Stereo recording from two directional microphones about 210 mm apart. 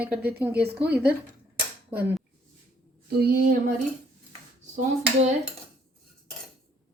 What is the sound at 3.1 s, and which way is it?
Speech, 50° right (ahead or behind).